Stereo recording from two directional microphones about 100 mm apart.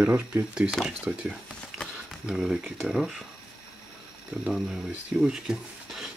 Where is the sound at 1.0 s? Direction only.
10° right (ahead or behind).